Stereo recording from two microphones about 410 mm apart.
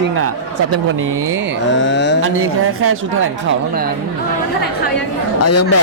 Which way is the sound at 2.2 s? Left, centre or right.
Right.